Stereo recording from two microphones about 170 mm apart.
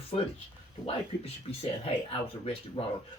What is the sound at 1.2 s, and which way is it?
Speech, 35° left (ahead or behind).